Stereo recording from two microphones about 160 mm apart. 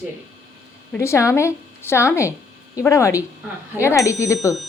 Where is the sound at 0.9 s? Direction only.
15° left (ahead or behind).